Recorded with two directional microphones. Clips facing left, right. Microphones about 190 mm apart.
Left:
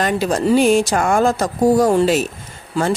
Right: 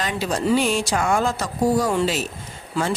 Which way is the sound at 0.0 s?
50° left (ahead or behind).